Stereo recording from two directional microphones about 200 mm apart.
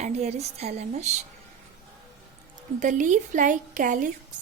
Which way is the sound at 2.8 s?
40° right (ahead or behind).